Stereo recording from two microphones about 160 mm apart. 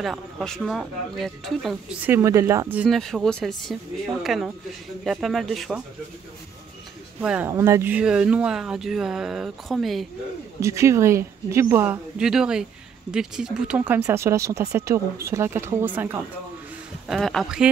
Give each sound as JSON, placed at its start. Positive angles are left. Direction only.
{"t": 0.0, "sound": "speech", "side_deg": 0}
{"t": 2.0, "sound": "speech", "side_deg": -15}
{"t": 2.8, "sound": "speech", "side_deg": 0}
{"t": 7.2, "sound": "speech", "side_deg": -10}
{"t": 10.6, "sound": "speech", "side_deg": -20}
{"t": 17.1, "sound": "speech", "side_deg": 0}